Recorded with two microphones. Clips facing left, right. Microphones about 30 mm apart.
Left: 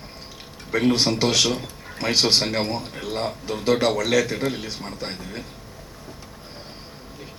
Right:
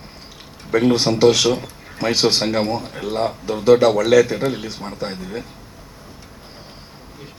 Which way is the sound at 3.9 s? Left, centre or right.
Right.